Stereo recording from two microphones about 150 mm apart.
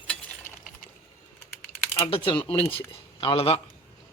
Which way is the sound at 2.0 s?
35° left (ahead or behind).